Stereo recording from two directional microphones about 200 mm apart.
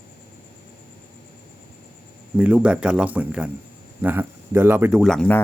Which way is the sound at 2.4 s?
5° right (ahead or behind).